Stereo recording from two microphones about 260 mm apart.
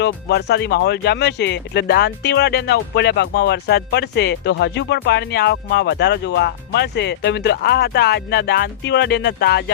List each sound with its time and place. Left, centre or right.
0.0 s speech: left